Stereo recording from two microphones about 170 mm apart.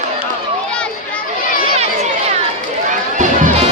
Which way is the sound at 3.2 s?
45° right (ahead or behind).